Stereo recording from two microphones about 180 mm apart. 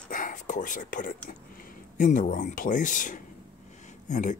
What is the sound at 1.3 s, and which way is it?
Speech, 50° left (ahead or behind).